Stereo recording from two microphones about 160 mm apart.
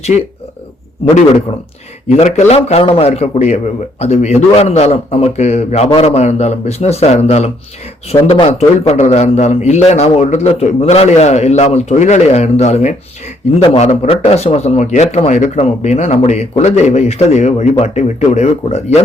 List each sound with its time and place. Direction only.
2.0 s a man's voice: 45° left (ahead or behind)